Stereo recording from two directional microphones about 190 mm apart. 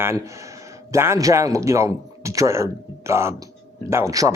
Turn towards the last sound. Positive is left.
turn(degrees=-15)  # may be behind; listen again after turning